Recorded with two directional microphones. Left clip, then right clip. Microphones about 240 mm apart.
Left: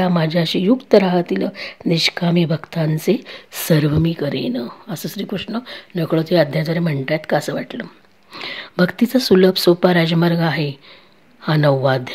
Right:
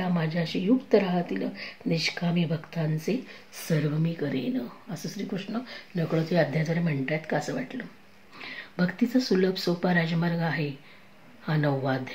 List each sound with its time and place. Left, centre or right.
0.0 s speech: left